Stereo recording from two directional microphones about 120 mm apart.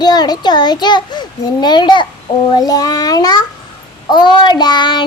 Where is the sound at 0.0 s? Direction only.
35° left (ahead or behind).